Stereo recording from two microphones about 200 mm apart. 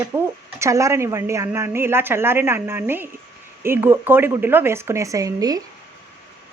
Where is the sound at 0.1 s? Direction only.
15° right (ahead or behind).